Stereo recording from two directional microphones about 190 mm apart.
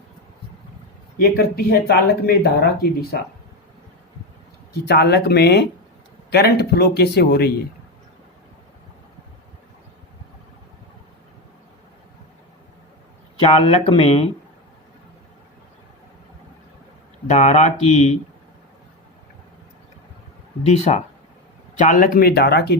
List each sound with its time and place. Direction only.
1.2 s speech: 55° left (ahead or behind)
4.7 s speech: 60° left (ahead or behind)
13.4 s speech: 30° left (ahead or behind)
17.2 s speech: 40° left (ahead or behind)
20.7 s speech: 35° left (ahead or behind); by 22.8 s 60° left (ahead or behind)